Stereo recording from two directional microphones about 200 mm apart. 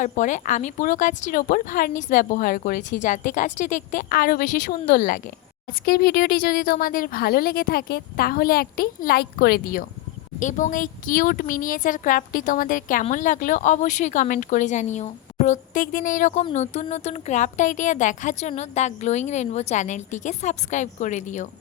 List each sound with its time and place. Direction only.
0.0 s a woman's voice: 40° left (ahead or behind)